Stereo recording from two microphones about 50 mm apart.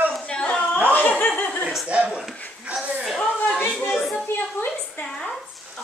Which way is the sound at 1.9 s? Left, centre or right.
Right.